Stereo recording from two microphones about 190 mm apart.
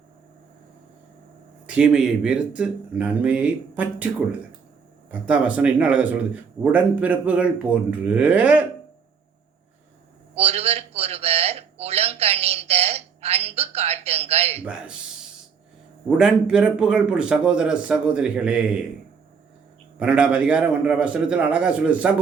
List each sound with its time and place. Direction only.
1.6 s speech: 5° right (ahead or behind)
10.3 s a sound: 35° right (ahead or behind)
14.6 s a man's voice: 5° right (ahead or behind)
16.0 s a man's voice: 5° right (ahead or behind)
20.0 s speech: 5° right (ahead or behind)